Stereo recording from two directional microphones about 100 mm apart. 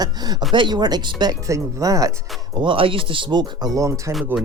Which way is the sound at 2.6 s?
60° right (ahead or behind).